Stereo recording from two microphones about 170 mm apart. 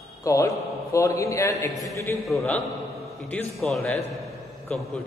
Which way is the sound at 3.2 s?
5° left (ahead or behind).